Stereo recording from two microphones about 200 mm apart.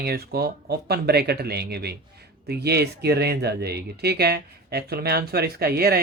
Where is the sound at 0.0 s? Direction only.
50° right (ahead or behind).